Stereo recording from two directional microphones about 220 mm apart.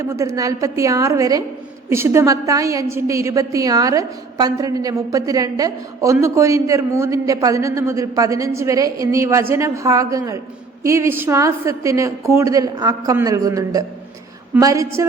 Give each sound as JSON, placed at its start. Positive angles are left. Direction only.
{"t": 0.0, "sound": "a woman's voice", "side_deg": -15}